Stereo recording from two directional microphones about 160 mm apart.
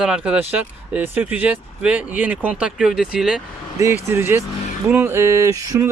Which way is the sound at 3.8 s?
15° right (ahead or behind).